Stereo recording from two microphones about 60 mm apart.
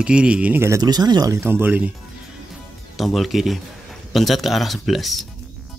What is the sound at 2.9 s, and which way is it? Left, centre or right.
Speech, centre.